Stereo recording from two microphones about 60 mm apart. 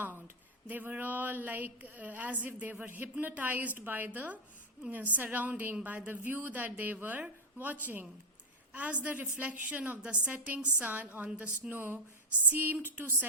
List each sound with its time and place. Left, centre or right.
0.7 s a woman's voice: right